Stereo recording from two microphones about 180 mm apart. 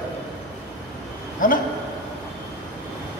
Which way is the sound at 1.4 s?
50° left (ahead or behind).